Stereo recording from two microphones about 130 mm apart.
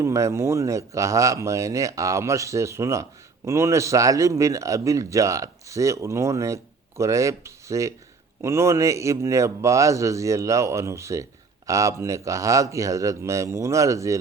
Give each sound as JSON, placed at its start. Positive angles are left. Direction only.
{"t": 0.0, "sound": "speech", "side_deg": -25}